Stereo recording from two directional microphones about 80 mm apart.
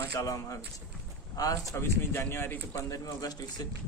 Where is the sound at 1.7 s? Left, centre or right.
Left.